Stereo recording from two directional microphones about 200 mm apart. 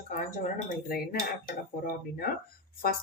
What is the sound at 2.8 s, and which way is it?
Cutlery, 50° left (ahead or behind).